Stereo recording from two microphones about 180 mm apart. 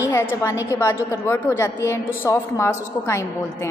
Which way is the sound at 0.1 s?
15° left (ahead or behind).